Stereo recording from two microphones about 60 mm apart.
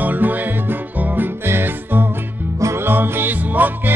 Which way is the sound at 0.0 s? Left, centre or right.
Right.